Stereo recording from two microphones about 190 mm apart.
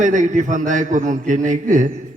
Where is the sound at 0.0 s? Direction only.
40° right (ahead or behind).